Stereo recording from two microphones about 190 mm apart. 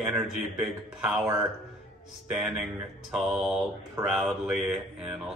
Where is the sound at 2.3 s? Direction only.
Centre (ahead or behind).